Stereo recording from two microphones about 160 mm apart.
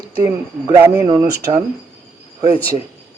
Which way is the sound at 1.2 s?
75° right (ahead or behind).